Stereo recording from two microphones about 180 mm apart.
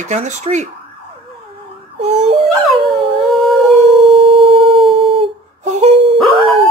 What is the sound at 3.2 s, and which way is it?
Howl, centre (ahead or behind).